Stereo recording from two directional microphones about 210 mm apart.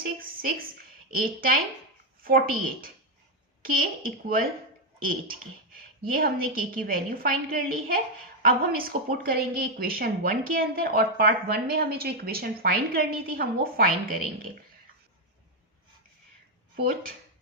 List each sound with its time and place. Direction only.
0.0 s a sound: 45° right (ahead or behind)
1.1 s a woman's voice: 45° right (ahead or behind)
3.6 s a woman's voice: 45° right (ahead or behind)
16.7 s a woman's voice: 45° right (ahead or behind)